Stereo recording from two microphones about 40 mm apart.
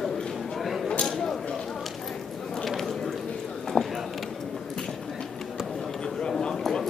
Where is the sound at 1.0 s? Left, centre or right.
Centre.